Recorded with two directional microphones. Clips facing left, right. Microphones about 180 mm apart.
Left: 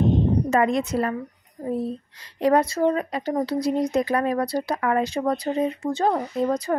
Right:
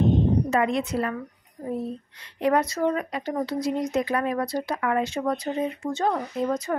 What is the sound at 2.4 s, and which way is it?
A child's voice, 30° left (ahead or behind).